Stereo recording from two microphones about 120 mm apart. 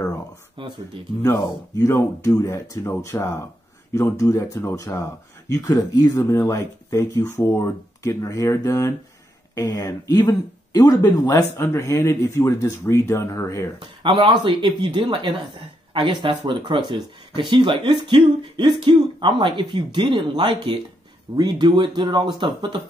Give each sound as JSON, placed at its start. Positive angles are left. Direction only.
{"t": 0.6, "sound": "speech", "side_deg": -45}
{"t": 1.8, "sound": "speech", "side_deg": 25}
{"t": 5.5, "sound": "speech", "side_deg": 35}
{"t": 11.5, "sound": "speech", "side_deg": 20}
{"t": 13.7, "sound": "speech", "side_deg": -40}